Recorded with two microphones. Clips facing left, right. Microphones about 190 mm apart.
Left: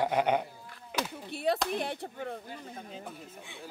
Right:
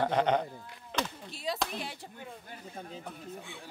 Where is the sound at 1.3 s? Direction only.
60° left (ahead or behind).